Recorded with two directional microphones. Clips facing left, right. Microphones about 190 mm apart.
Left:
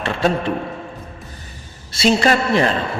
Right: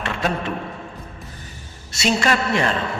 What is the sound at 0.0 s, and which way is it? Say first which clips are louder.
Speech: left 5 dB; 30° left (ahead or behind).